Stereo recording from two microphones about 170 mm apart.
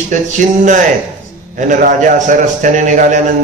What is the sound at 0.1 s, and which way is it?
A man's voice, 45° right (ahead or behind).